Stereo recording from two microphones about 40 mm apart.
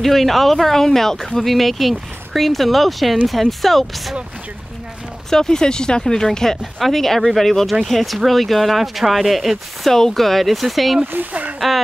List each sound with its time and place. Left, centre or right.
0.0 s speech: centre
1.4 s speech: centre
5.3 s speech: centre
9.8 s speech: centre
11.1 s speech: right